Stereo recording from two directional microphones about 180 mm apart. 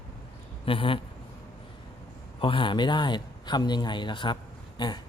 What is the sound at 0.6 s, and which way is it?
Speech, 30° left (ahead or behind).